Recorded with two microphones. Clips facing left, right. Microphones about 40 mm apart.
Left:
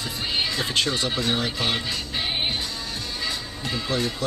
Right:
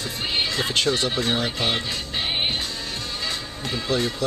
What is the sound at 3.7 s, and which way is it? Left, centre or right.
Speech, right.